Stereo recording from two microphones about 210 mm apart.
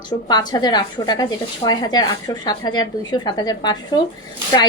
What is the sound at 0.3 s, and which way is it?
A woman's voice, 20° left (ahead or behind).